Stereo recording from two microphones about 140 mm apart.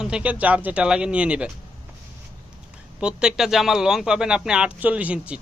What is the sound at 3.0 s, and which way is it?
Speech, 5° right (ahead or behind).